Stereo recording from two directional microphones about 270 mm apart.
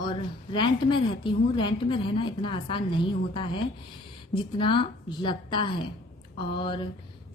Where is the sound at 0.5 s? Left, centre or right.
Centre.